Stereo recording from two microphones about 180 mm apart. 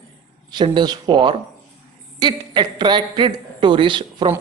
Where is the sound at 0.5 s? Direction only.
25° right (ahead or behind).